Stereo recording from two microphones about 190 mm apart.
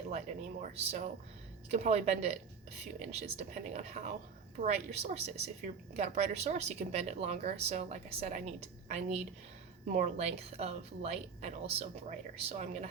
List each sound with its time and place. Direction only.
0.6 s a woman's voice: 35° right (ahead or behind)